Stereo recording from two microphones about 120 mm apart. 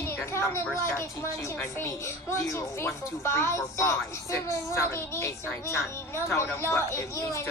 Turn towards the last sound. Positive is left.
turn(degrees=25)  # may be behind; listen again after turning